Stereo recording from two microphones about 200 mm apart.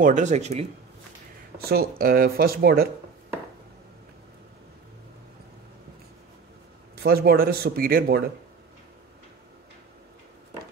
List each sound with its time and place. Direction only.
0.0 s speech: 35° right (ahead or behind)
1.6 s speech: 50° right (ahead or behind)
7.0 s speech: 50° right (ahead or behind)